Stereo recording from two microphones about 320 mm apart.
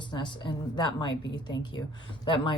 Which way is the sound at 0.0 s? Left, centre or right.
Centre.